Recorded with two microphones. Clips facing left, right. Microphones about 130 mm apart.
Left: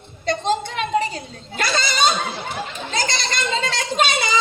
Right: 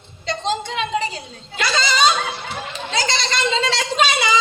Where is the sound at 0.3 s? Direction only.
50° left (ahead or behind).